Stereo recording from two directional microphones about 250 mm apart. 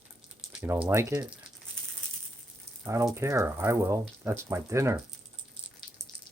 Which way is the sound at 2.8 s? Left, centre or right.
Centre.